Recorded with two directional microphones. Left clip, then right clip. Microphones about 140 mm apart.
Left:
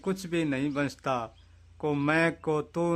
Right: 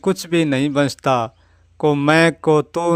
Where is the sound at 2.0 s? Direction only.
55° right (ahead or behind).